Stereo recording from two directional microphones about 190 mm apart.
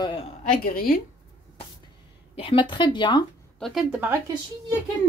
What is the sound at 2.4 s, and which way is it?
Speech, 25° left (ahead or behind).